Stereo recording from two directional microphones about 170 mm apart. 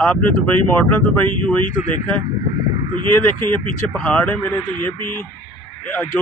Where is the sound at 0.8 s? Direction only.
10° left (ahead or behind).